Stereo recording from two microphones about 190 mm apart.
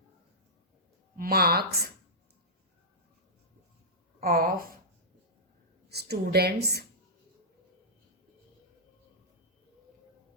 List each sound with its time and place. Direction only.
1.1 s speech: 50° right (ahead or behind)
4.2 s a woman's voice: 50° right (ahead or behind)
5.9 s a woman's voice: 60° right (ahead or behind)